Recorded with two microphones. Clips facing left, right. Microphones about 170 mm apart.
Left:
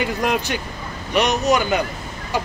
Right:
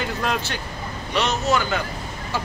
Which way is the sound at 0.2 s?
15° left (ahead or behind).